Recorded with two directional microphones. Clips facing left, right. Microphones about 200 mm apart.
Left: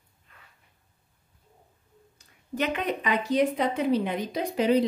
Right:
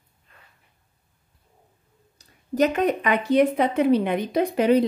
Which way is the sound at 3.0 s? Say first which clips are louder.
Right 3 dB; 60° right (ahead or behind).